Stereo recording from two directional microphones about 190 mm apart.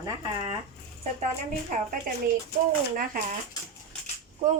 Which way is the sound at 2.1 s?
45° right (ahead or behind).